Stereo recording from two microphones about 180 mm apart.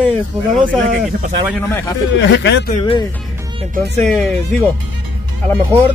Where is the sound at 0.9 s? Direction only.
40° right (ahead or behind).